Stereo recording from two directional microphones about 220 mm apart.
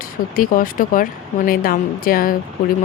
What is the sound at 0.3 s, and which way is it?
Speech, 40° left (ahead or behind).